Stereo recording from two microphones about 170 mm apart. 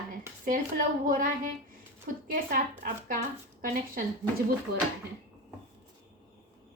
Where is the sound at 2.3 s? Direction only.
55° right (ahead or behind).